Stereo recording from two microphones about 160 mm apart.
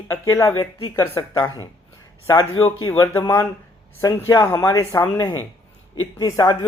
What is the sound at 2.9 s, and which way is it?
Speech, 20° left (ahead or behind).